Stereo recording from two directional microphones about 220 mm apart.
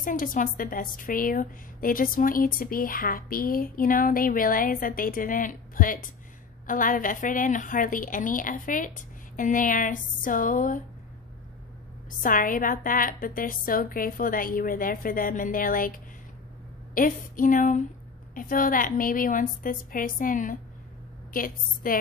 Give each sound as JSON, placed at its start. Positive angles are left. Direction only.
{"t": 0.0, "sound": "a woman's voice", "side_deg": 40}
{"t": 12.2, "sound": "a woman's voice", "side_deg": 40}
{"t": 16.9, "sound": "a woman's voice", "side_deg": 40}